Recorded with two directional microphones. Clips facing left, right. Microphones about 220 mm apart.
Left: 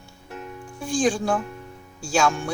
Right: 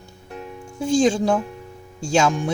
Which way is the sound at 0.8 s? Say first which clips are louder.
Right 5 dB; 25° right (ahead or behind).